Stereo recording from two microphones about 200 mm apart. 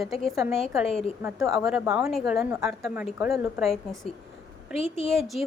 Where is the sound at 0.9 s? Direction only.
30° left (ahead or behind).